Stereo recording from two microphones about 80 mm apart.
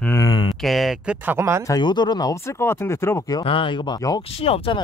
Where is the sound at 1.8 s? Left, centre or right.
Left.